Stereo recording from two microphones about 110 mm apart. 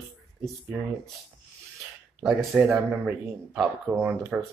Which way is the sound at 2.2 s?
Centre (ahead or behind).